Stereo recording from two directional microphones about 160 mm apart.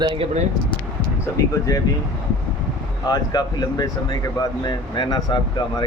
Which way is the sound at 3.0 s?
25° left (ahead or behind).